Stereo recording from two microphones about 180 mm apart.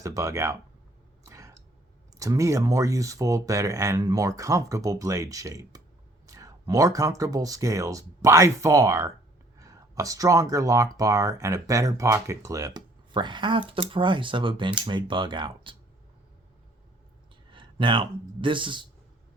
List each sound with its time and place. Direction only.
0.0 s speech: 15° right (ahead or behind)
1.2 s a sound: 15° right (ahead or behind)
2.1 s speech: 20° right (ahead or behind)
17.5 s speech: 25° right (ahead or behind)